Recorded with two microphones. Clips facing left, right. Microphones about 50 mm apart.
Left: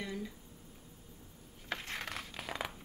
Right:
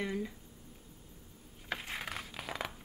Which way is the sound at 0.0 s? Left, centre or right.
Right.